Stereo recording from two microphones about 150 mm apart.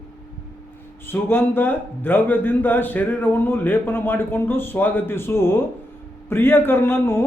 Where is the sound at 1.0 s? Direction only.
15° left (ahead or behind).